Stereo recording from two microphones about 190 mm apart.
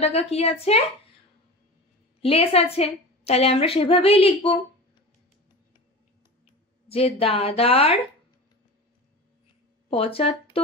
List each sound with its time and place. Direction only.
0.0 s a woman's voice: 35° left (ahead or behind)
2.2 s a woman's voice: 30° left (ahead or behind)
6.9 s a woman's voice: 30° left (ahead or behind)
9.8 s speech: 30° left (ahead or behind)